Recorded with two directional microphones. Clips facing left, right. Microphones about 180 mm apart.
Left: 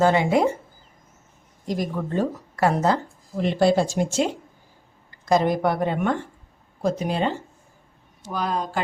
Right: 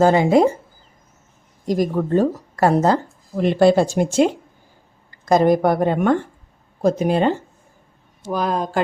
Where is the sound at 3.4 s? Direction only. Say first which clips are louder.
Right 5 dB; 55° right (ahead or behind).